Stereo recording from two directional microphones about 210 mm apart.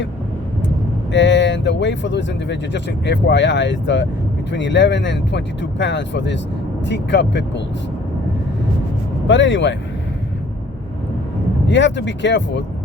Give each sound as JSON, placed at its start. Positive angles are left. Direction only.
{"t": 1.1, "sound": "speech", "side_deg": 60}
{"t": 9.2, "sound": "speech", "side_deg": 60}
{"t": 11.7, "sound": "speech", "side_deg": 60}